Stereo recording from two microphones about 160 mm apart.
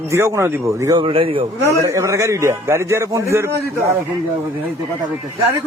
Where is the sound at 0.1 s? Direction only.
15° right (ahead or behind); by 1.5 s 35° right (ahead or behind).